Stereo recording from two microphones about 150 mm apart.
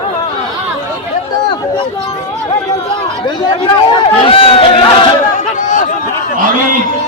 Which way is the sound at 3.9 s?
35° left (ahead or behind).